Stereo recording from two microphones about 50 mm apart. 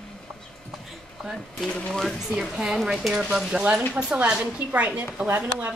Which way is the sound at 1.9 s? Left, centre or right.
Centre.